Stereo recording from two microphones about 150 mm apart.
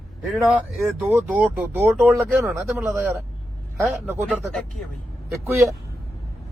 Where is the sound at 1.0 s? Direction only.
10° right (ahead or behind).